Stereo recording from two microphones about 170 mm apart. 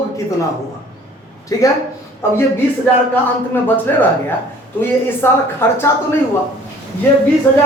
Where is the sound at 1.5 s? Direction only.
20° left (ahead or behind).